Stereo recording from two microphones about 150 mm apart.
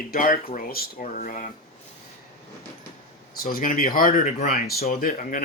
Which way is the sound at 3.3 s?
75° left (ahead or behind).